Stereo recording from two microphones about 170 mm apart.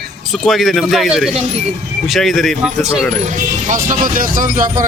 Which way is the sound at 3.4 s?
50° right (ahead or behind).